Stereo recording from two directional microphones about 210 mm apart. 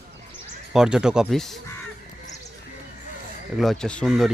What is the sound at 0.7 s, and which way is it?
Speech, 5° right (ahead or behind).